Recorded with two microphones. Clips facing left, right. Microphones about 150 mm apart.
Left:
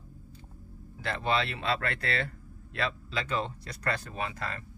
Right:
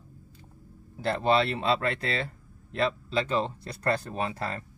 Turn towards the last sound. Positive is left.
turn(degrees=-35)  # may be behind; listen again after turning